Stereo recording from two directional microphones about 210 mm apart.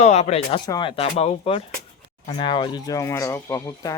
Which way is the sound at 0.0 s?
30° left (ahead or behind).